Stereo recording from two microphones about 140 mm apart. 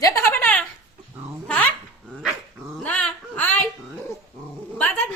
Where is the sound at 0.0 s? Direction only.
15° left (ahead or behind).